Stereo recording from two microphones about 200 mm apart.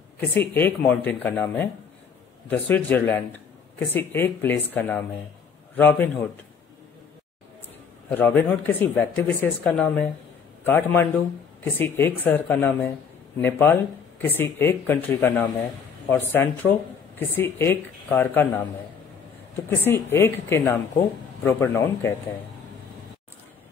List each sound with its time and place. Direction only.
0.3 s speech: 10° left (ahead or behind)
8.1 s speech: 10° left (ahead or behind)
19.7 s speech: 10° left (ahead or behind)